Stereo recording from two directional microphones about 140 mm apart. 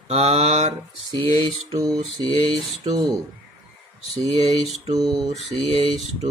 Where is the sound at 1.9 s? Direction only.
40° right (ahead or behind).